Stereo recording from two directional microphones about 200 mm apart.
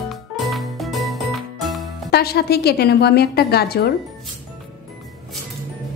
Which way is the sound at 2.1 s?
50° left (ahead or behind).